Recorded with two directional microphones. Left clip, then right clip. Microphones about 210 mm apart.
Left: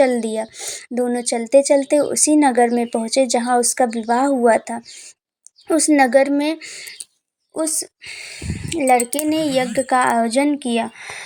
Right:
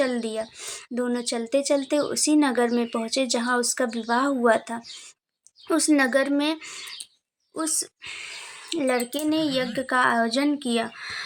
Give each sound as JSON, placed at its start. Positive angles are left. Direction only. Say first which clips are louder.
{"t": 0.0, "sound": "a woman's voice", "louder": "left 9 dB", "side_deg": 25}